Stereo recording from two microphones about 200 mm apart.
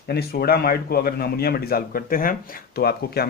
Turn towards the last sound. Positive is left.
turn(degrees=50)  # may be behind; listen again after turning